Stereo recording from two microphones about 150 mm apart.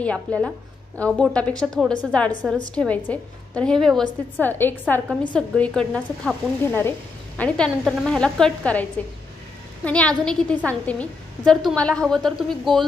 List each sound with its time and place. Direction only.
0.0 s a woman's voice: 10° left (ahead or behind)
9.8 s a woman's voice: 10° left (ahead or behind)